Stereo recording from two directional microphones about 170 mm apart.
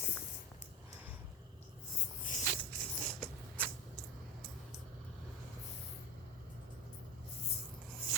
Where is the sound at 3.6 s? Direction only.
10° left (ahead or behind).